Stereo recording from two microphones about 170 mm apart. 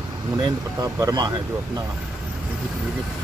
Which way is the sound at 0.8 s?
20° right (ahead or behind).